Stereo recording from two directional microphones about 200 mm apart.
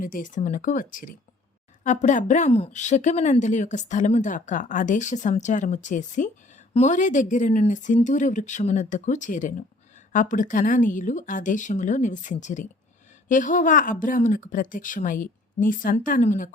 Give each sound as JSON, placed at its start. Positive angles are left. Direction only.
{"t": 0.0, "sound": "speech", "side_deg": 40}